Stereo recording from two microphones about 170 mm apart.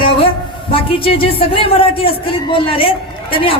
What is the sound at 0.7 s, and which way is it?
A man's voice, 30° left (ahead or behind).